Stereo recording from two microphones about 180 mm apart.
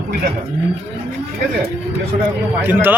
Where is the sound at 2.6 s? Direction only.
10° right (ahead or behind).